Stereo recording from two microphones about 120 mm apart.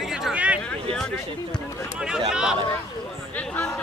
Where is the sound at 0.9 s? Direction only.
5° left (ahead or behind).